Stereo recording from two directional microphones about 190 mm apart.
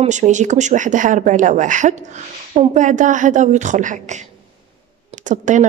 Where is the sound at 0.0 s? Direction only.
40° right (ahead or behind).